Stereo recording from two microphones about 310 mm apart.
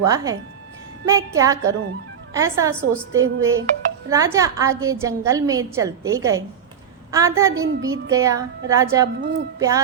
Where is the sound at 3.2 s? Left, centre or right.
Right.